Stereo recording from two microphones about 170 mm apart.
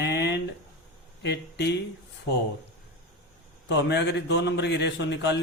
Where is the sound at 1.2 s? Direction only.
85° left.